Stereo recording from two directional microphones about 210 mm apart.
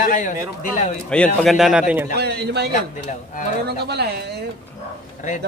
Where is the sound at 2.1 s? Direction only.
50° right (ahead or behind).